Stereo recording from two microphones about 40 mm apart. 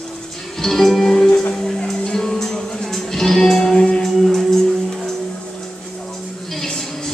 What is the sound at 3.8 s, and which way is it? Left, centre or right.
Music, left.